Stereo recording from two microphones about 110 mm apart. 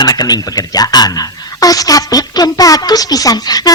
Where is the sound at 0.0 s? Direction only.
40° left (ahead or behind).